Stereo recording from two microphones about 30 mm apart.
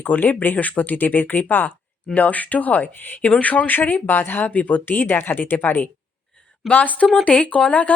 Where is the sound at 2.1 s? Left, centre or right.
Left.